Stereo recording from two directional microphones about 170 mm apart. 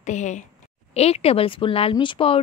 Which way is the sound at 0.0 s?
45° left (ahead or behind).